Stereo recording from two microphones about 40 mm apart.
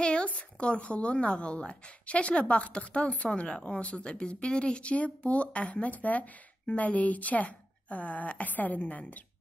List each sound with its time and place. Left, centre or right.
0.0 s a woman's voice: left